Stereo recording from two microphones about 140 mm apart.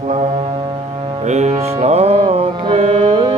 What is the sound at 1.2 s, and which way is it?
Music, 55° right (ahead or behind).